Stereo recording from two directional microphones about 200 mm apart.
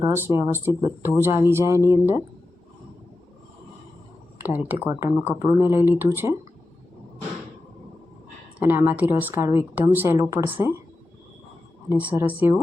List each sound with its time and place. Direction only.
0.0 s a woman's voice: 10° right (ahead or behind)
4.4 s a woman's voice: 10° right (ahead or behind)
8.5 s a woman's voice: 10° right (ahead or behind)
11.9 s a woman's voice: 5° right (ahead or behind)